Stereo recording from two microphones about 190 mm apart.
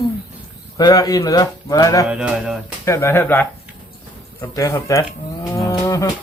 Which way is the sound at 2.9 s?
15° left (ahead or behind).